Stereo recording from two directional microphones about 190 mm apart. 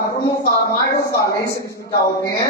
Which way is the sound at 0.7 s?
20° left (ahead or behind).